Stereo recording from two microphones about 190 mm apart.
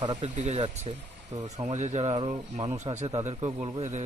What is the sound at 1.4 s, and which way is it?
Speech, 20° right (ahead or behind).